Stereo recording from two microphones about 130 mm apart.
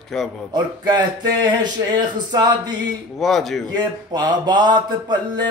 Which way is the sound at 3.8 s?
35° right (ahead or behind).